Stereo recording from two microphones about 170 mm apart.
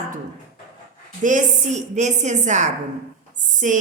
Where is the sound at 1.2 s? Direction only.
45° right (ahead or behind).